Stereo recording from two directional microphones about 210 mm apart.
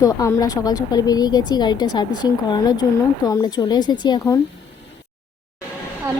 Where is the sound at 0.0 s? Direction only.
15° left (ahead or behind).